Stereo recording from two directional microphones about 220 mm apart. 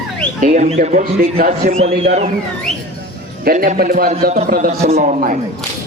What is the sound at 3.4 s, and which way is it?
A man's voice, 40° right (ahead or behind).